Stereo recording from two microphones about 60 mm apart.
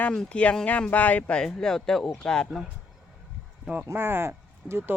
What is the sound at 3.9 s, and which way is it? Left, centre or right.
Speech, right.